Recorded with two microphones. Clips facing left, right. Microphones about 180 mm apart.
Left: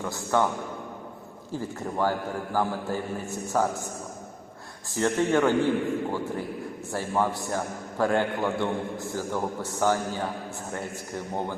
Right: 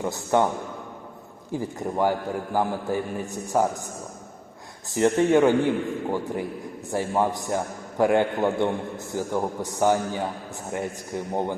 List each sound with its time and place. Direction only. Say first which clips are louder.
0.0 s a man's voice: right 3 dB; 20° right (ahead or behind)
1.5 s a man's voice: right 3 dB; 15° right (ahead or behind)
4.9 s a man's voice: right 5 dB; 15° right (ahead or behind)